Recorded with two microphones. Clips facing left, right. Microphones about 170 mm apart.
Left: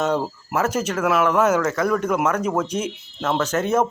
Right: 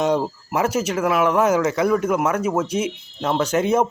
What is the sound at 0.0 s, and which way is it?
Speech, 15° right (ahead or behind).